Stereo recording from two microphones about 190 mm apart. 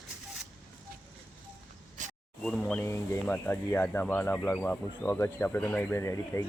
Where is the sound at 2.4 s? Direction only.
5° left (ahead or behind).